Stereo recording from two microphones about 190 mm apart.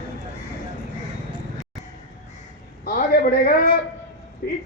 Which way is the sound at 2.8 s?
50° left (ahead or behind).